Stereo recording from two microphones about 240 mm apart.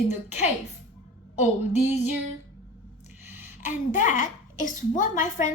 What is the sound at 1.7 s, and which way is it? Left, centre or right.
Speech, left.